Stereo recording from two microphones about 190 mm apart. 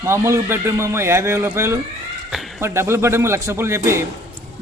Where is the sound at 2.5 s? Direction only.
15° right (ahead or behind).